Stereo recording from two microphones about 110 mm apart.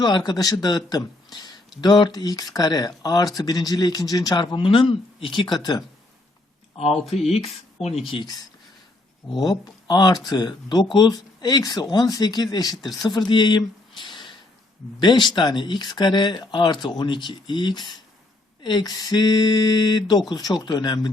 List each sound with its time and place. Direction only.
0.0 s speech: 40° left (ahead or behind)
4.5 s speech: 50° left (ahead or behind)
6.7 s speech: 65° left (ahead or behind)
7.0 s speech: centre (ahead or behind)
7.3 s speech: 70° left (ahead or behind)
8.0 s speech: 50° left (ahead or behind)
9.4 s speech: 35° left (ahead or behind)